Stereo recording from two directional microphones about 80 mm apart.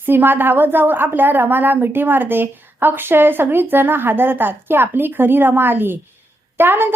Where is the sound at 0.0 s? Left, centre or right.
Right.